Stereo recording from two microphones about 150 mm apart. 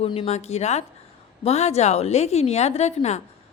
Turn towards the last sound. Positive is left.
turn(degrees=45)  # may be behind; listen again after turning